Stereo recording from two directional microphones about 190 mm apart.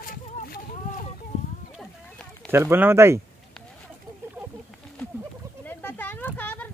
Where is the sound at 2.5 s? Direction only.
10° right (ahead or behind).